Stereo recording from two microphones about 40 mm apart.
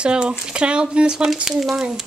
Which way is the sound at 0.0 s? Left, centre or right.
Right.